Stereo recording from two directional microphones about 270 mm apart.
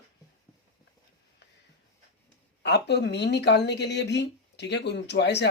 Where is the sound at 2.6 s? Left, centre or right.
Left.